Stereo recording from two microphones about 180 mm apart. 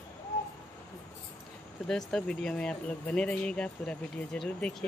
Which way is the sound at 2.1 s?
5° left (ahead or behind).